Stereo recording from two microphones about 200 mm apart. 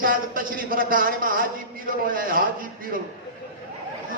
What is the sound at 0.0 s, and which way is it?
A man's voice, 45° right (ahead or behind).